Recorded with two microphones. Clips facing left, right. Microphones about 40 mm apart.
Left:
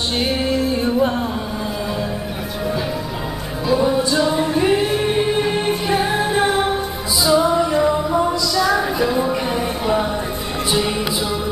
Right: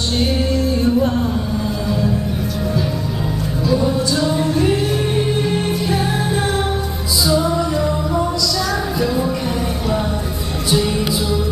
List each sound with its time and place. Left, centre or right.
0.2 s music: centre
3.6 s music: centre